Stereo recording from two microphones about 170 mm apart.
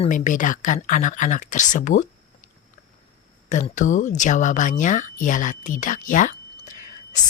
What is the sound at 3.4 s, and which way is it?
Speech, 45° left (ahead or behind).